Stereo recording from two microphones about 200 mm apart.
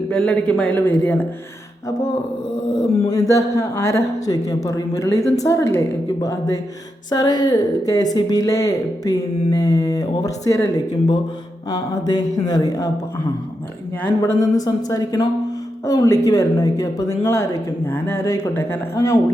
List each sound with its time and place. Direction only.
0.1 s speech: 5° left (ahead or behind)
2.7 s speech: 15° left (ahead or behind)
7.1 s speech: 20° left (ahead or behind)
14.2 s speech: 15° left (ahead or behind)